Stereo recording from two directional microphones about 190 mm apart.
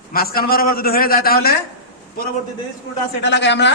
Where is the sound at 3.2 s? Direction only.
65° left (ahead or behind).